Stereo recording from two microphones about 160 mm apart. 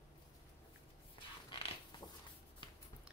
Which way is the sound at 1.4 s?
30° left (ahead or behind).